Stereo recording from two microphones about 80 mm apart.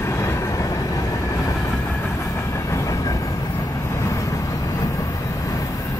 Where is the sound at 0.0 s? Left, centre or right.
Left.